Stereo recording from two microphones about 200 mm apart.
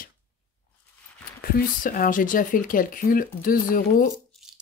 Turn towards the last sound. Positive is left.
turn(degrees=45)  # may be behind; listen again after turning